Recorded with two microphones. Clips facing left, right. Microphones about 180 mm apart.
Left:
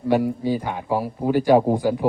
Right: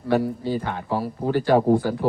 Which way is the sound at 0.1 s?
15° left (ahead or behind).